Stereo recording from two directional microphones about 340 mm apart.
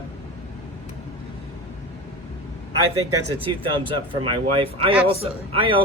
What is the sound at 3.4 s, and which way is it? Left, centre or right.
Speech, centre.